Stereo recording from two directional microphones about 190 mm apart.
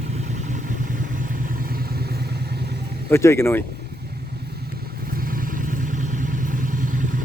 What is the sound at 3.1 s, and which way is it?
Speech, 15° left (ahead or behind).